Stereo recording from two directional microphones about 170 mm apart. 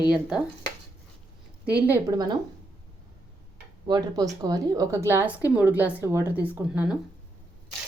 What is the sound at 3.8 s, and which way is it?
A woman's voice, 25° right (ahead or behind).